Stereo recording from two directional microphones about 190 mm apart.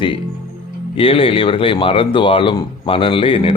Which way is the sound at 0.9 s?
30° left (ahead or behind).